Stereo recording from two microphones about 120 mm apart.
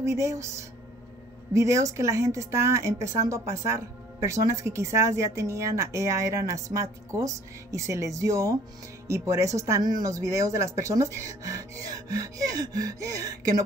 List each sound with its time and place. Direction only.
0.0 s a woman's voice: 25° right (ahead or behind)